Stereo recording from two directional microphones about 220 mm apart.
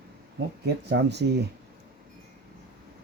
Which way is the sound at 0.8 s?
50° right (ahead or behind).